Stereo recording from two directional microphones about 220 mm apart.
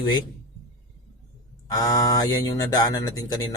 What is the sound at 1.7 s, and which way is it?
Speech, 15° left (ahead or behind).